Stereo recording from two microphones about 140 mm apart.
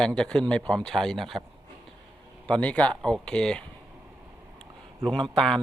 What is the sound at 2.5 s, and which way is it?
A man's voice, 10° left (ahead or behind).